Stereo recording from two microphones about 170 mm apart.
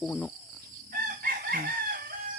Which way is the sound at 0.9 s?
60° right (ahead or behind).